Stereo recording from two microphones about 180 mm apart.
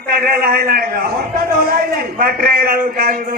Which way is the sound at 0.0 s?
55° right (ahead or behind).